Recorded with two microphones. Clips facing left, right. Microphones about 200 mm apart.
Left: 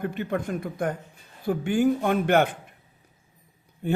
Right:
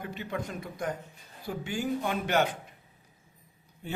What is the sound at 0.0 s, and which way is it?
A man's voice, 55° left (ahead or behind).